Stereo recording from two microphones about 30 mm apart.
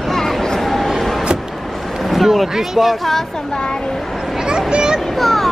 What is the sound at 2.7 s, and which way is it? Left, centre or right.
Speech, centre.